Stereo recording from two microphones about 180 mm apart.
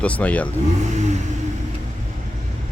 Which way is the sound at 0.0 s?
10° left (ahead or behind).